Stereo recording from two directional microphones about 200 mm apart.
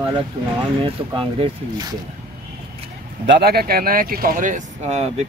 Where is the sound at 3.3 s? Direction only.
55° right (ahead or behind); by 5.2 s 35° right (ahead or behind).